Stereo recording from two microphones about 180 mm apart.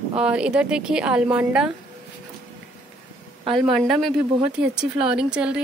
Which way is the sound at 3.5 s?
Centre (ahead or behind).